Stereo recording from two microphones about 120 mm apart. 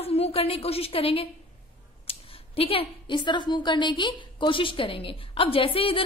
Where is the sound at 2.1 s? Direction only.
55° left (ahead or behind).